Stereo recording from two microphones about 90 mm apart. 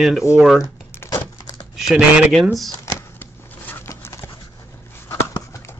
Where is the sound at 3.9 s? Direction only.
30° left (ahead or behind).